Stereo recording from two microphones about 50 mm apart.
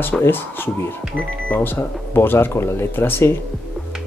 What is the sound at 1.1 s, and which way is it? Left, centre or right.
Speech, left.